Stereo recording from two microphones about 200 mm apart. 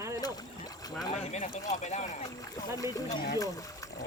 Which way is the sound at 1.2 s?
35° left (ahead or behind).